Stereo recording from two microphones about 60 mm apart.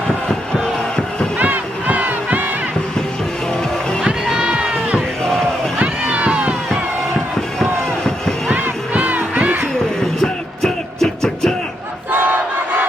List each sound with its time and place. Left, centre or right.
1.4 s crowd: right
4.3 s a sound: centre
5.8 s a sound: right
7.6 s run: centre
8.4 s crowd: right
10.2 s music: centre
12.1 s battle cry: right